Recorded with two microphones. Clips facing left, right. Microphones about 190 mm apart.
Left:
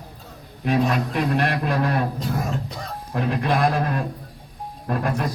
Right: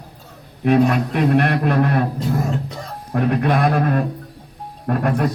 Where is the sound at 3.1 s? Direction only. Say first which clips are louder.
Right 5 dB; 65° right (ahead or behind).